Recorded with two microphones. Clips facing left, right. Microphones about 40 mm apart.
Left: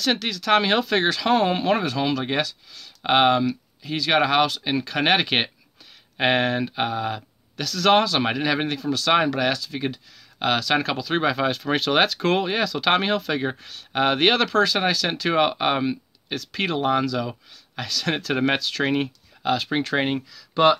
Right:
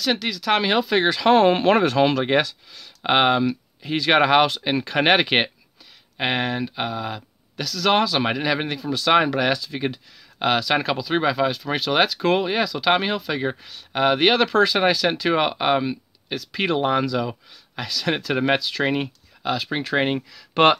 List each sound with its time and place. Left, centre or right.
0.0 s speech: centre
1.3 s speech: right
3.0 s speech: centre
3.9 s speech: right
6.1 s speech: centre
14.5 s speech: centre
20.5 s speech: right